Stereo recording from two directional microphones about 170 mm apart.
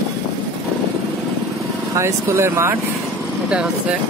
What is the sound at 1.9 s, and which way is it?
Speech, 15° right (ahead or behind).